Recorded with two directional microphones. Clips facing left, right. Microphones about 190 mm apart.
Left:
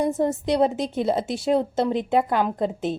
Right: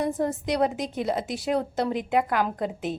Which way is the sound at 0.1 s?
25° left (ahead or behind).